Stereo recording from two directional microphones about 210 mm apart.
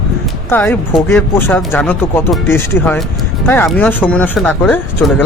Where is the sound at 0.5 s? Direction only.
10° left (ahead or behind).